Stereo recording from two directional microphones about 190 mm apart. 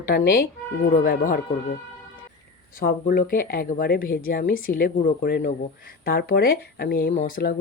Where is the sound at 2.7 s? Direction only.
50° left (ahead or behind).